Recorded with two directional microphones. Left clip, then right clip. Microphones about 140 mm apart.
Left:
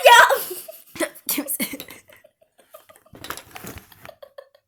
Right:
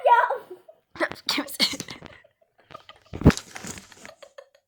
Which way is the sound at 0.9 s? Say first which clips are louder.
Right 1 dB; 35° left (ahead or behind).